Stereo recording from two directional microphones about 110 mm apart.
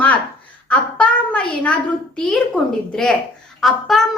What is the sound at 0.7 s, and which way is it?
A child's voice, 10° left (ahead or behind).